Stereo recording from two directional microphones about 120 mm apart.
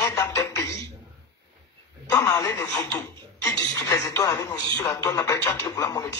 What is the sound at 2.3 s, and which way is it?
Speech, 25° left (ahead or behind).